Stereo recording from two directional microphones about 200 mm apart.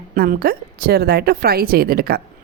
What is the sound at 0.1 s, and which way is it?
Speech, 45° right (ahead or behind).